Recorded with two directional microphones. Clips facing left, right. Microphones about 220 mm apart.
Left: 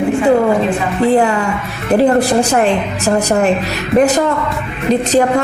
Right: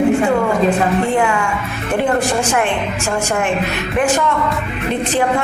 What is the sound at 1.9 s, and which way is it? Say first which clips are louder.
Speech: left 6 dB; 35° left (ahead or behind).